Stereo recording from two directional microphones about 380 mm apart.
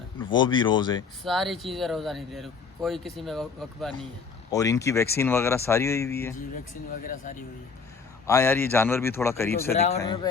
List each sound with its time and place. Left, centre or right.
0.2 s speech: centre
1.2 s speech: centre
7.0 s speech: left
8.3 s speech: centre